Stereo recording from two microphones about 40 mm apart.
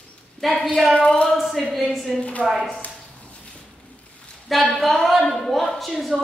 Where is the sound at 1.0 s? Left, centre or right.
Centre.